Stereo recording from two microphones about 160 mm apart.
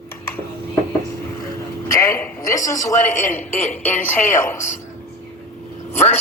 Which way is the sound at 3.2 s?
50° left (ahead or behind).